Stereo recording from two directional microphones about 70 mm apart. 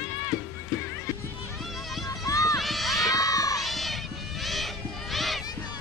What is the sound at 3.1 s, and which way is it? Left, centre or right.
Children shouting, left.